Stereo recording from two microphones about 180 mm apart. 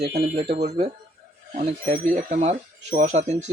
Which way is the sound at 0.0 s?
65° right (ahead or behind).